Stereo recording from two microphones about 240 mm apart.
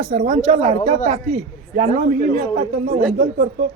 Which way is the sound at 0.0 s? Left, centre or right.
Right.